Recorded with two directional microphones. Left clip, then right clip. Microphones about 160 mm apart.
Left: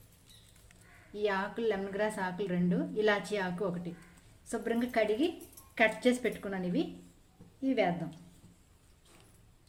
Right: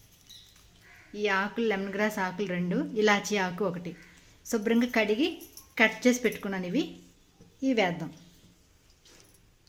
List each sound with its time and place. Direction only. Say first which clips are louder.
1.1 s a woman's voice: right 4 dB; 40° right (ahead or behind); by 7.9 s 55° right (ahead or behind)